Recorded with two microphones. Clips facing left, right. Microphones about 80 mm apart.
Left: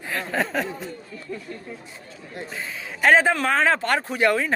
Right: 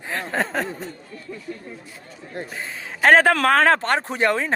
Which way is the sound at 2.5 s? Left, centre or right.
Right.